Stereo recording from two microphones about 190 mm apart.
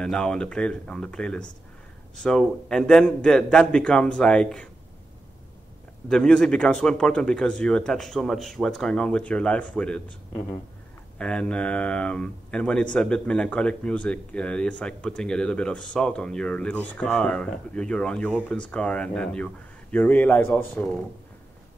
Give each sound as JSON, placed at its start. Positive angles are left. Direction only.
{"t": 0.0, "sound": "speech", "side_deg": 5}
{"t": 6.0, "sound": "speech", "side_deg": 5}
{"t": 11.1, "sound": "speech", "side_deg": 5}